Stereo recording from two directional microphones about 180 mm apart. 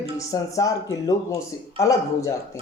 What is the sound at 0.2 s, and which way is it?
Speech, 20° left (ahead or behind).